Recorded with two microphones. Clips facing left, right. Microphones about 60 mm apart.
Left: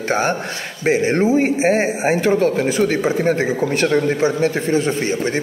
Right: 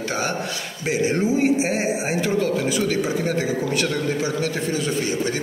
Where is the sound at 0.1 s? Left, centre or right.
Left.